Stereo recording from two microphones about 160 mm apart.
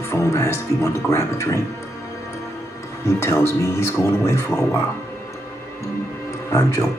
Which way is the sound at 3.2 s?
15° left (ahead or behind).